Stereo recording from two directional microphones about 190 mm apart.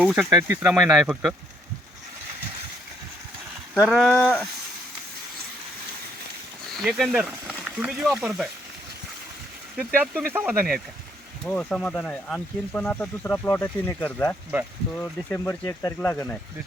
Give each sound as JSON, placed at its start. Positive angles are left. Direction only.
{"t": 0.0, "sound": "speech", "side_deg": -5}
{"t": 0.3, "sound": "speech", "side_deg": -20}
{"t": 0.6, "sound": "speech", "side_deg": -5}
{"t": 3.8, "sound": "speech", "side_deg": -5}
{"t": 6.7, "sound": "speech", "side_deg": 0}
{"t": 9.7, "sound": "speech", "side_deg": -10}